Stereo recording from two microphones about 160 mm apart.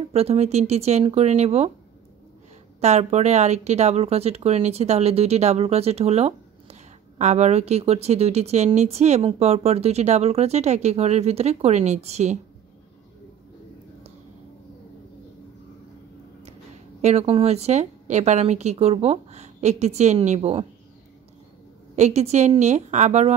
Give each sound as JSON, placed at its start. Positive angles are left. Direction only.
{"t": 0.1, "sound": "speech", "side_deg": -40}
{"t": 2.8, "sound": "speech", "side_deg": -45}
{"t": 17.0, "sound": "speech", "side_deg": -40}
{"t": 21.9, "sound": "speech", "side_deg": -45}